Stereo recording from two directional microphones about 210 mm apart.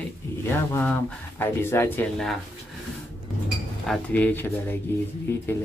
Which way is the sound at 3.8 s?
5° left (ahead or behind).